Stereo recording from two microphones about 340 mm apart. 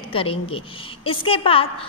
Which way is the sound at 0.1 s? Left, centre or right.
Centre.